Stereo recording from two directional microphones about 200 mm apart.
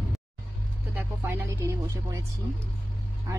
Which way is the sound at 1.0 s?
10° right (ahead or behind).